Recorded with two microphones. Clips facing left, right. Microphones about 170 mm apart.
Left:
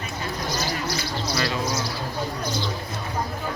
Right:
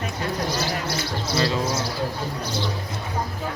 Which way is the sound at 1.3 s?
25° right (ahead or behind).